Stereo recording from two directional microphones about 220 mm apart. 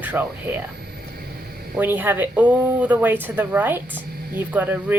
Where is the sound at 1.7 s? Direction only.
10° right (ahead or behind).